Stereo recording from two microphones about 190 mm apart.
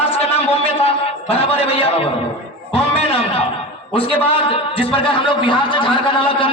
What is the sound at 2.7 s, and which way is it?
Music, 30° left (ahead or behind).